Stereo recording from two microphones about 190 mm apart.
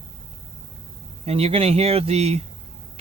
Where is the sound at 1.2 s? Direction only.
30° right (ahead or behind).